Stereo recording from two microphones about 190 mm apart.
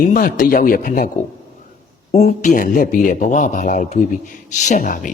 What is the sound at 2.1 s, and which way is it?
A man's voice, 35° left (ahead or behind).